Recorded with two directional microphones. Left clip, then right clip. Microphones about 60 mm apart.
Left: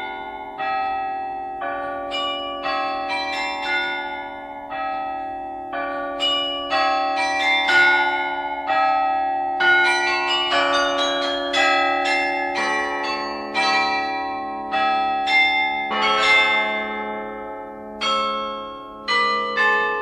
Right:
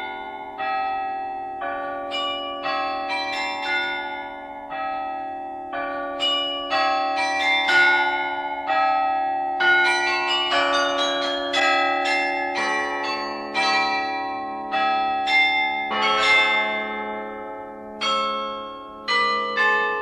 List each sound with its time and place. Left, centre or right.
0.6 s church bell: right
1.7 s change ringing: right
5.8 s change ringing: right
18.0 s bell: right
19.0 s change ringing: right